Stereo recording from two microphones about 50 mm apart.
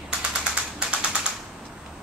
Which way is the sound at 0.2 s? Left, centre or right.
Right.